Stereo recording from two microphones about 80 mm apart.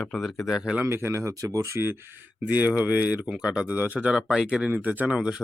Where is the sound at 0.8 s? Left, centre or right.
Right.